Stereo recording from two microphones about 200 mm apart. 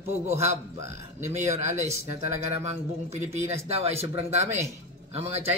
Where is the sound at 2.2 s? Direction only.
35° right (ahead or behind).